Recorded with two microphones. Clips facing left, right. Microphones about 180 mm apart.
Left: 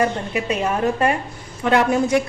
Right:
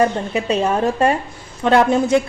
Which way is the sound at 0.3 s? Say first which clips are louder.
Right 4 dB; 30° right (ahead or behind).